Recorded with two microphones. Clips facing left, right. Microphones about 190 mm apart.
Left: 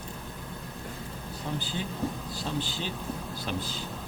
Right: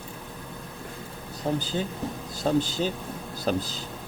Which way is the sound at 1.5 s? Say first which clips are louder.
Right 5 dB; 45° right (ahead or behind).